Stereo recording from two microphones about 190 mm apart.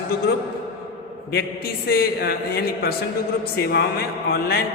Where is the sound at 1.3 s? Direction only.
55° left (ahead or behind).